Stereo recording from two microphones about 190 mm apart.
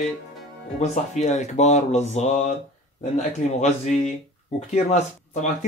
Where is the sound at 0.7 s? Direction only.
35° left (ahead or behind).